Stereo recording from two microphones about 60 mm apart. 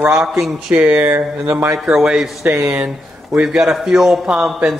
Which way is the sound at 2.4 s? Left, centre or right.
Right.